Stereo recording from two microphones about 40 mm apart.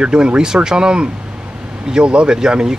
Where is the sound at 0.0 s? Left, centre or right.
Right.